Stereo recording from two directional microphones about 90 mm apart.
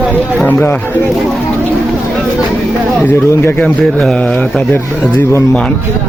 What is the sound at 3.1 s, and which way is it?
Speech, 30° left (ahead or behind).